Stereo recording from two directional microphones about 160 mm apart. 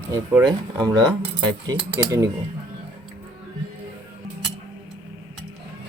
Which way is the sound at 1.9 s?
20° right (ahead or behind).